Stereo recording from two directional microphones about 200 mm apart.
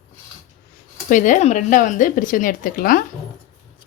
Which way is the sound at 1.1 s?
40° left (ahead or behind).